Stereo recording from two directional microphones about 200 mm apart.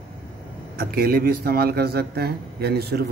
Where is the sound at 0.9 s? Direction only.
50° right (ahead or behind).